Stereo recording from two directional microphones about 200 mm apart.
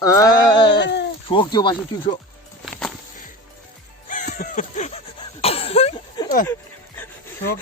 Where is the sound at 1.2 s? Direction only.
25° left (ahead or behind).